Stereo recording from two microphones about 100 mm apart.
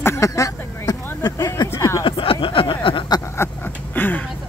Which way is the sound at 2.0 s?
60° left (ahead or behind).